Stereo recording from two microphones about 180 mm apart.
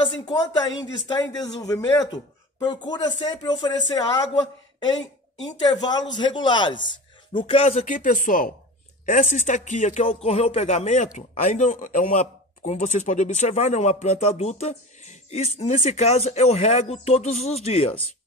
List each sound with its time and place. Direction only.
1.0 s a man's voice: 20° left (ahead or behind)